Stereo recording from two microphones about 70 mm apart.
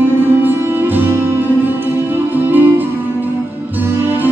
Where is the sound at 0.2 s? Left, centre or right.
Right.